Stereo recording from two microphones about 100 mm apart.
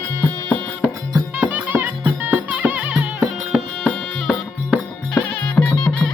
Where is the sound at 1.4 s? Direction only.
15° right (ahead or behind).